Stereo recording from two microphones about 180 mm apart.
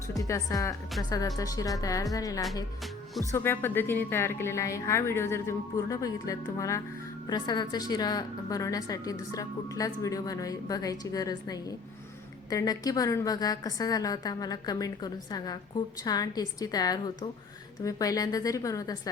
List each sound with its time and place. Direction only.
0.1 s a woman's voice: 20° left (ahead or behind)